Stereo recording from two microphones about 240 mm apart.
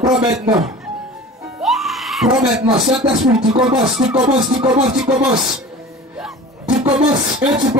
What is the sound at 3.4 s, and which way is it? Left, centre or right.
Speech, centre.